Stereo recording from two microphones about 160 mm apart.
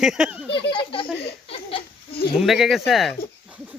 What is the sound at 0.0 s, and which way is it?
Speech, 5° right (ahead or behind).